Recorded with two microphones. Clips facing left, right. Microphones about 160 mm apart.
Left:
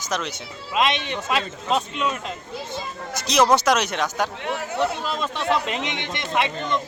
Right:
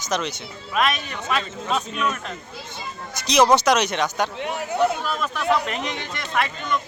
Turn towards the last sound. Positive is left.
turn(degrees=20)  # may be behind; listen again after turning